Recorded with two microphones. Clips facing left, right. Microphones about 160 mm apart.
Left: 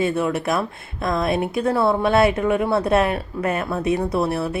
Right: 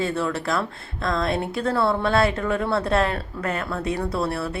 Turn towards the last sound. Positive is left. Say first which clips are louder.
# left 4 dB
turn(degrees=20)  # may be behind; listen again after turning